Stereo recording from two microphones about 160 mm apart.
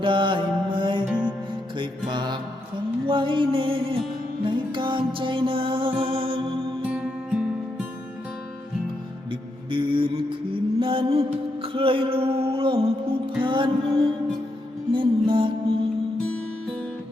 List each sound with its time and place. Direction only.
0.0 s music: 30° right (ahead or behind)
6.9 s music: 5° right (ahead or behind)
9.3 s mantra: 30° right (ahead or behind)
14.9 s music: 30° right (ahead or behind)